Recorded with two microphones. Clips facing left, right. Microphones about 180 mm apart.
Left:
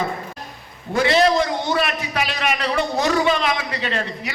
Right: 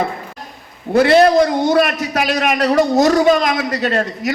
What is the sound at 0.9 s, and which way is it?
A man's voice, 55° right (ahead or behind).